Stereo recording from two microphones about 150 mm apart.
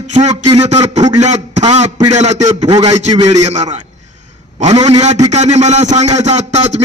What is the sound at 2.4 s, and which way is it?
Speech, 25° right (ahead or behind).